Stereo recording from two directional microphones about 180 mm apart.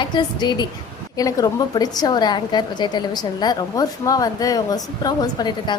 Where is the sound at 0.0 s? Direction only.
25° left (ahead or behind).